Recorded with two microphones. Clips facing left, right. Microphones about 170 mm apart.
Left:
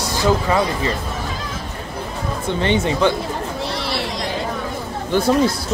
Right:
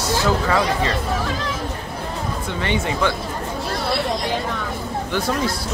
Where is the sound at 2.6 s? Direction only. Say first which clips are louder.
Left 4 dB; 25° left (ahead or behind).